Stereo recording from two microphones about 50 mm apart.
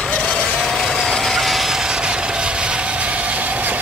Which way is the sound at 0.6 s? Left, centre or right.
Centre.